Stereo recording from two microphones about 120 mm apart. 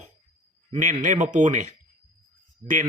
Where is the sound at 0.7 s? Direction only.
90° right.